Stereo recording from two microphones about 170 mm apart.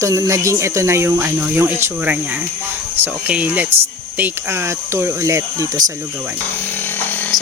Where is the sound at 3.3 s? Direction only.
10° right (ahead or behind).